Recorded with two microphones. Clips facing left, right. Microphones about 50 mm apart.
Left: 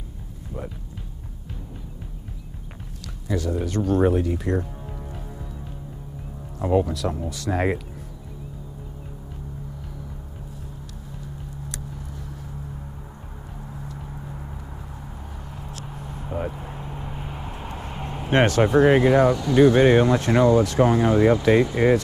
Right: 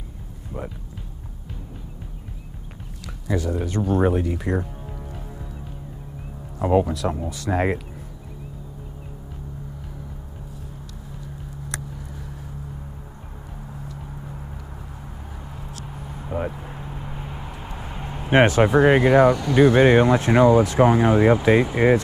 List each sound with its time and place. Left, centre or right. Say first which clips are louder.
3.3 s speech: even; centre
6.6 s speech: right 2 dB; centre
15.8 s vehicle: even; centre
16.5 s a sound: left 1 dB; centre
18.3 s speech: right 2 dB; centre